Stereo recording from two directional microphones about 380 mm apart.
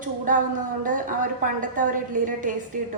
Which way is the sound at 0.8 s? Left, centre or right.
Right.